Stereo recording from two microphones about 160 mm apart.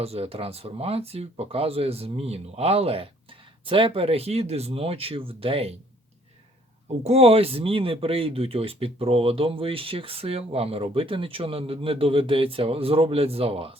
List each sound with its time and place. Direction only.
0.0 s speech: 40° right (ahead or behind)
7.0 s speech: 40° right (ahead or behind)